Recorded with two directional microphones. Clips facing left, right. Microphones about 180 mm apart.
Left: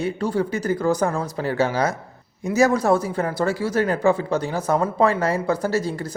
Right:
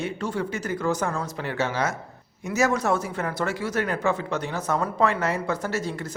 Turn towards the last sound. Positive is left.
turn(degrees=35)  # may be behind; listen again after turning